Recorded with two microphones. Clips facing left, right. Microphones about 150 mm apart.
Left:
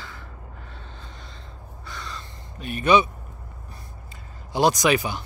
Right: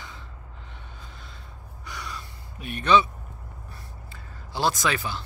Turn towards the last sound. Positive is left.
turn(degrees=15)  # may be behind; listen again after turning